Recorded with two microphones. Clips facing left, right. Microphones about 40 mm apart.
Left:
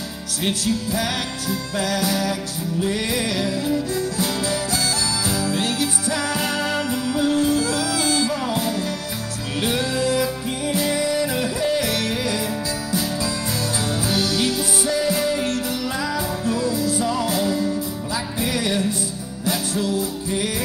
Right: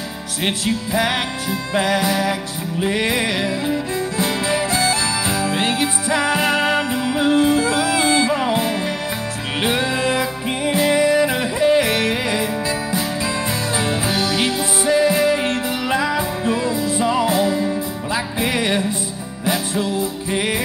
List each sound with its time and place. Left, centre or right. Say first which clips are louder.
0.4 s music: right 2 dB; right
13.7 s music: right 3 dB; right